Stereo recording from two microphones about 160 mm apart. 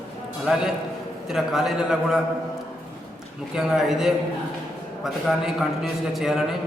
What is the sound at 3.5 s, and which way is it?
A man's voice, 5° right (ahead or behind).